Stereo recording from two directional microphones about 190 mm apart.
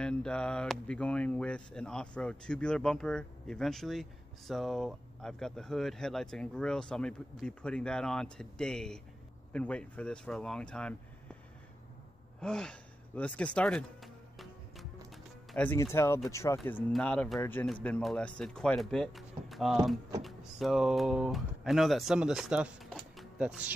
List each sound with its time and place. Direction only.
0.0 s speech: 5° left (ahead or behind)
12.4 s music: 5° left (ahead or behind)
15.5 s speech: 10° left (ahead or behind); by 23.7 s 5° right (ahead or behind)